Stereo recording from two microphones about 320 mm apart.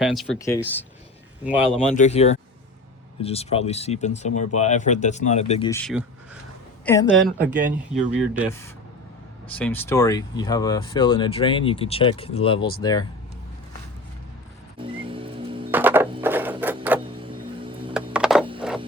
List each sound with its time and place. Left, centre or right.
0.0 s a woman's voice: centre
1.5 s a woman's voice: centre
2.0 s speech: centre
5.8 s a woman's voice: centre; by 12.8 s left
12.8 s speech: centre
14.8 s music: centre
17.2 s music: centre
18.1 s a sound: centre